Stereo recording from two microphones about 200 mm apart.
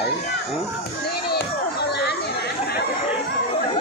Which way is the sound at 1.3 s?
50° left (ahead or behind).